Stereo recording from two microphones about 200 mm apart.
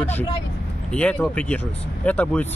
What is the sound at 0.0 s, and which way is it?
Speech, 10° left (ahead or behind).